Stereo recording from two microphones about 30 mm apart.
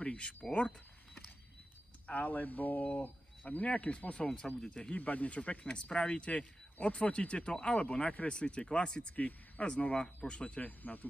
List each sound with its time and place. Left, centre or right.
0.0 s speech: left
2.0 s speech: left
4.6 s speech: left
4.9 s speech: left
9.1 s speech: left
10.2 s speech: left
10.6 s speech: left